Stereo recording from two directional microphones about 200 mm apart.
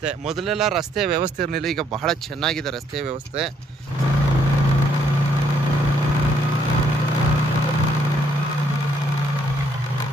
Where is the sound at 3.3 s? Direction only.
30° right (ahead or behind).